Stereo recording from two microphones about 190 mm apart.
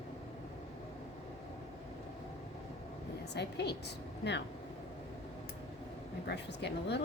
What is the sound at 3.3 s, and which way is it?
Speech, 60° left (ahead or behind).